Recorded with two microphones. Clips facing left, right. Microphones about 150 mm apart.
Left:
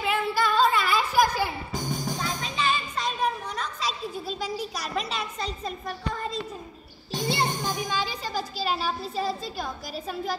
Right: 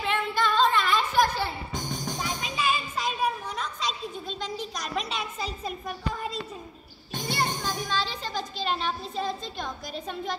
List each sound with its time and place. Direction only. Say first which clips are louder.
0.0 s music: left 1 dB; 10° left (ahead or behind)
2.1 s music: left 1 dB; 10° right (ahead or behind)
7.2 s music: left 2 dB; 25° left (ahead or behind)
7.8 s speech: left 1 dB; 10° left (ahead or behind)